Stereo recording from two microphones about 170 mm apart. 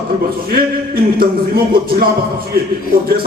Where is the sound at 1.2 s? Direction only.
60° right (ahead or behind).